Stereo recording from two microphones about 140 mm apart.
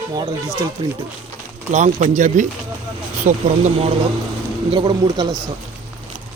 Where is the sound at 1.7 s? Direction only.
60° right (ahead or behind).